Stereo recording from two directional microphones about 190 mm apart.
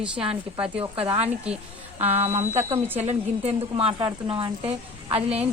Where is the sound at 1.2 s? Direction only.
5° right (ahead or behind).